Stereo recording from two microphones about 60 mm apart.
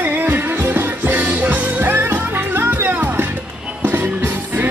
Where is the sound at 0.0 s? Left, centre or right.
Right.